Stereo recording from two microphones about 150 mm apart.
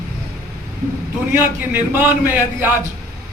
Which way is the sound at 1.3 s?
10° right (ahead or behind).